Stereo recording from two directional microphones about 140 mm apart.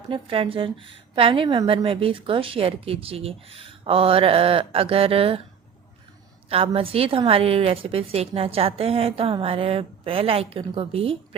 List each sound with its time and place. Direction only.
0.1 s a woman's voice: 40° right (ahead or behind)
6.5 s a woman's voice: 40° right (ahead or behind)